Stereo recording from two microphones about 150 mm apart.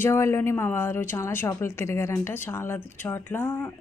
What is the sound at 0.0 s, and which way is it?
A woman's voice, 15° left (ahead or behind).